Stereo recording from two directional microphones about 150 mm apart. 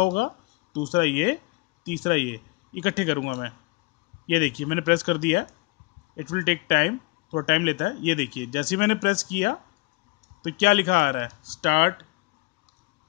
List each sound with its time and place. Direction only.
0.0 s speech: 75° left (ahead or behind)
4.3 s speech: 70° left (ahead or behind)
7.3 s speech: 85° left